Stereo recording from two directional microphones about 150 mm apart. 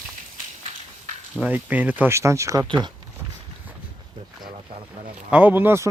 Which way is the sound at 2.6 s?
30° right (ahead or behind).